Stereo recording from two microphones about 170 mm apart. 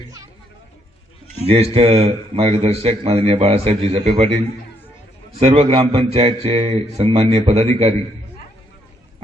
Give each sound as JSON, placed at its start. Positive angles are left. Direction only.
{"t": 1.5, "sound": "a man's voice", "side_deg": -40}
{"t": 5.4, "sound": "a man's voice", "side_deg": -35}